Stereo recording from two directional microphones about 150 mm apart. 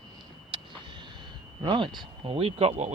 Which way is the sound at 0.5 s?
30° right (ahead or behind).